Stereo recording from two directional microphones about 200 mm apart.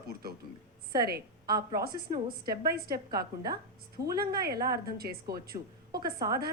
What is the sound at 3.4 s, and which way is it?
Speech, 20° right (ahead or behind).